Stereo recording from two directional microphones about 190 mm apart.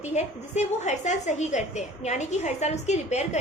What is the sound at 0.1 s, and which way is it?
A woman's voice, 35° left (ahead or behind).